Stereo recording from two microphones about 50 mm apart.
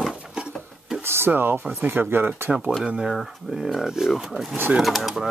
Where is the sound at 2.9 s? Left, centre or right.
Centre.